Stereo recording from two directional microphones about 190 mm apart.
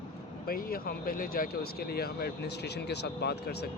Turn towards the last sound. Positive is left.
turn(degrees=60)  # may be behind; listen again after turning